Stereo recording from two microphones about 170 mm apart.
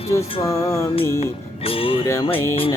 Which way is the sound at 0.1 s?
15° left (ahead or behind).